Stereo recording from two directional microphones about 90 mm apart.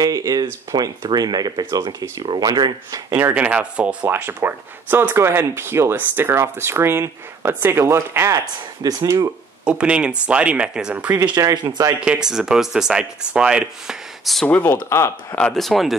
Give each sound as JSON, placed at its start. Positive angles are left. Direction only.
{"t": 0.0, "sound": "speech", "side_deg": -45}
{"t": 3.2, "sound": "speech", "side_deg": -20}
{"t": 8.8, "sound": "speech", "side_deg": -40}
{"t": 9.7, "sound": "speech", "side_deg": -10}
{"t": 11.1, "sound": "speech", "side_deg": -50}
{"t": 12.0, "sound": "speech", "side_deg": -10}
{"t": 14.2, "sound": "speech", "side_deg": 0}
{"t": 14.5, "sound": "speech", "side_deg": 20}
{"t": 15.3, "sound": "speech", "side_deg": 5}